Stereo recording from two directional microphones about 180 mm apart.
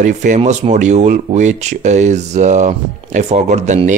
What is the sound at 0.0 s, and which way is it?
Speech, 45° right (ahead or behind).